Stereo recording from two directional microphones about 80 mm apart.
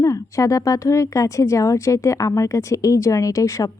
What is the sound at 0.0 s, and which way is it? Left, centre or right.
Speech, left.